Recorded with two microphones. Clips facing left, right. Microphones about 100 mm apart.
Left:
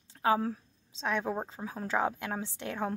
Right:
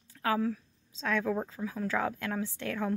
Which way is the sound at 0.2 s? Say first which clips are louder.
Left 2 dB; 25° left (ahead or behind).